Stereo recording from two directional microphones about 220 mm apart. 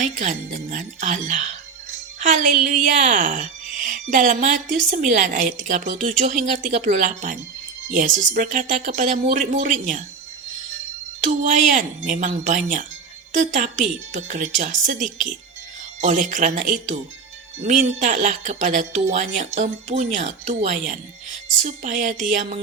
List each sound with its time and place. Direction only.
0.0 s a woman's voice: 35° right (ahead or behind)
2.8 s a woman's voice: 35° right (ahead or behind)
11.2 s a woman's voice: 35° right (ahead or behind)